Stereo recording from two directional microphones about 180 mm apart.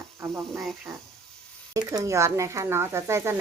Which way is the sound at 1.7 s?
20° right (ahead or behind).